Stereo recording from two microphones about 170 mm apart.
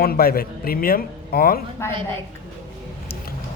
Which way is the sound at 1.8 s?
15° left (ahead or behind).